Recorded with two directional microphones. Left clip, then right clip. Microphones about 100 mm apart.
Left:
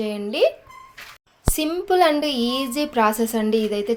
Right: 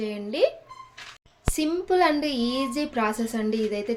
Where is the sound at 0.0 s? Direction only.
20° left (ahead or behind).